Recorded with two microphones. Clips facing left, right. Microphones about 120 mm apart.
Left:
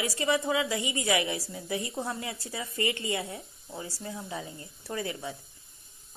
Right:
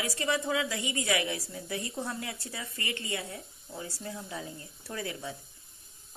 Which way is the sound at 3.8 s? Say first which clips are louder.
Left 1 dB; 5° left (ahead or behind).